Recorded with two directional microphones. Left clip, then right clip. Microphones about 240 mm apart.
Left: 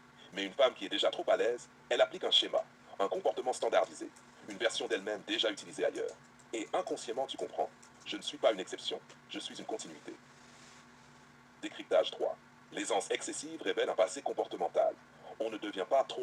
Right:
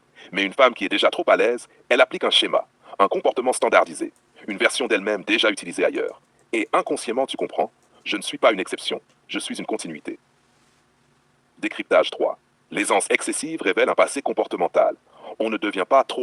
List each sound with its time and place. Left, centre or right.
0.2 s speech: right
11.6 s speech: right